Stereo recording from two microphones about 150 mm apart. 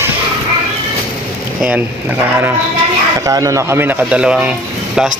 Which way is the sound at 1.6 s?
10° right (ahead or behind).